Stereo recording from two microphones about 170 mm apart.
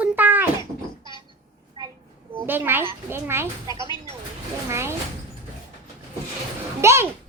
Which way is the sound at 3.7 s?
25° left (ahead or behind).